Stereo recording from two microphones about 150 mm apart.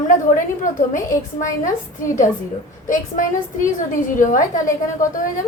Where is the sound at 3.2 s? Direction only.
60° left (ahead or behind).